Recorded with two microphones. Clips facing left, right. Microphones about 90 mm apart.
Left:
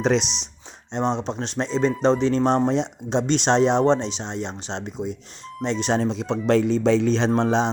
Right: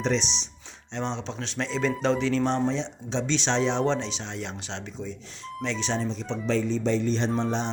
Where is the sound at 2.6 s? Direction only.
50° left (ahead or behind).